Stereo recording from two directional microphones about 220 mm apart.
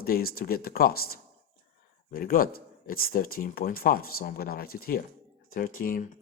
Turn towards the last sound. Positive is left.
turn(degrees=40)  # may be behind; listen again after turning